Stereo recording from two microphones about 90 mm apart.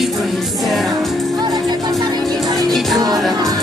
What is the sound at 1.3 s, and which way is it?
Music, 50° right (ahead or behind).